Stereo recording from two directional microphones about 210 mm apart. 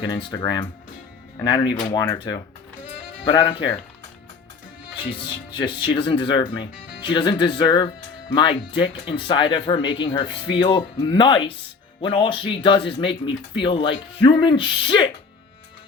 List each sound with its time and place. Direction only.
0.3 s speech: 20° left (ahead or behind)
5.5 s speech: 20° left (ahead or behind)